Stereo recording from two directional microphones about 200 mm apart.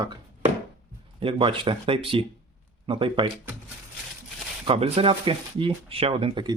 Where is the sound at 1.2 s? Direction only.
25° right (ahead or behind).